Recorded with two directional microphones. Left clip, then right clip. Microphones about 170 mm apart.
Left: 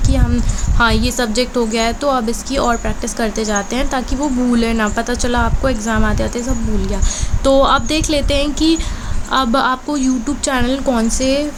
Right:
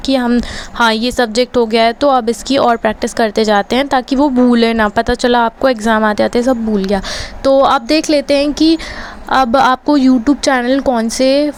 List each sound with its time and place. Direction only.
0.0 s a woman's voice: 45° right (ahead or behind)